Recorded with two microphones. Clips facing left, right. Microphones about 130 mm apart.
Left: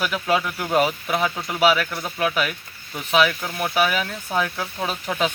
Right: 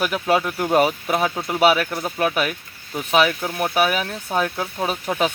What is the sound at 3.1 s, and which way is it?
Speech, 35° right (ahead or behind).